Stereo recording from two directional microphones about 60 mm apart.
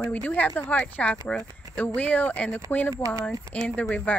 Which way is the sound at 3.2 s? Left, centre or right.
Left.